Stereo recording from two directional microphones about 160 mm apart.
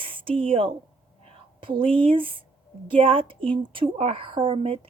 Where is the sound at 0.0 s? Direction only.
35° right (ahead or behind).